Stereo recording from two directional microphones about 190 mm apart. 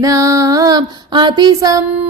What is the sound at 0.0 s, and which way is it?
Music, 15° right (ahead or behind).